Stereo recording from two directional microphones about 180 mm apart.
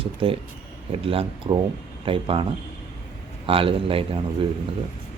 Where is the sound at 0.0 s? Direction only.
30° right (ahead or behind).